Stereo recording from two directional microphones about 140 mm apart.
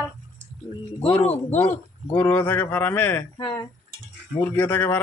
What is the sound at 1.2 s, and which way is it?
Speech, 50° left (ahead or behind).